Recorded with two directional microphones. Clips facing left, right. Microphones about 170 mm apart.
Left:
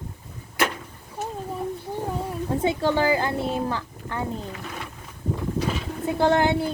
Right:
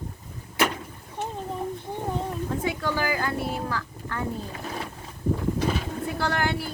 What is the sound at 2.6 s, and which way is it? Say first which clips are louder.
A woman's voice: left 7 dB; 25° left (ahead or behind).